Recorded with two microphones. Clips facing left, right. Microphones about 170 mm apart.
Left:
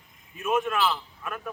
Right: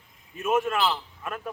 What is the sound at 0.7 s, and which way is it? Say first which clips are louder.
Speech: even; 25° right (ahead or behind).